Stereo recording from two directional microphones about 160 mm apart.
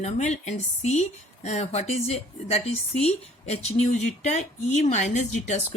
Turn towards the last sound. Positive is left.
turn(degrees=45)  # may be behind; listen again after turning